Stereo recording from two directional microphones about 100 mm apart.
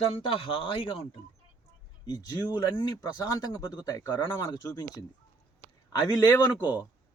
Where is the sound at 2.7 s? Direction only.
30° left (ahead or behind).